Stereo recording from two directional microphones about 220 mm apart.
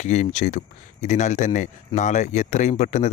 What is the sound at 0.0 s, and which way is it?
Speech, 30° left (ahead or behind).